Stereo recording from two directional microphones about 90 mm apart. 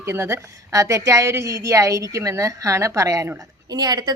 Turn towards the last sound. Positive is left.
turn(degrees=-50)  # may be behind; listen again after turning